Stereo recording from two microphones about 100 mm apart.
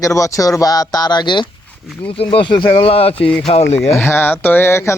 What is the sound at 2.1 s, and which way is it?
Speech, 70° left (ahead or behind).